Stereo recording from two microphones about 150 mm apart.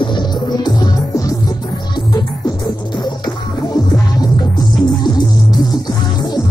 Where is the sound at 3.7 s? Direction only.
25° left (ahead or behind).